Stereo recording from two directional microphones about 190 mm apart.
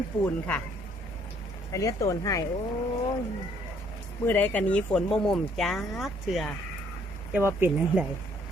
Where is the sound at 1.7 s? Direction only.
15° left (ahead or behind).